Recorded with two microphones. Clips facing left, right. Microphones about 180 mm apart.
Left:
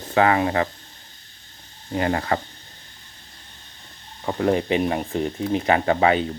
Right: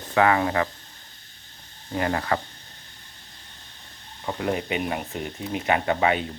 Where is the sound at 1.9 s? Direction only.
25° left (ahead or behind).